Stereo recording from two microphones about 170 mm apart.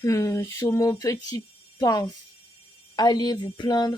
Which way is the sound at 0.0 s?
15° left (ahead or behind).